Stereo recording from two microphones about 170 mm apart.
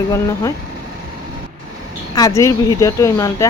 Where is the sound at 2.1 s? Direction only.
20° left (ahead or behind).